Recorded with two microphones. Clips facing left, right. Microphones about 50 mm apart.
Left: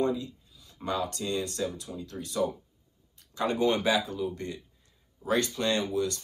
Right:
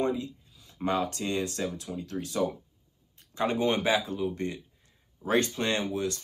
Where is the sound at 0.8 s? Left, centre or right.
Right.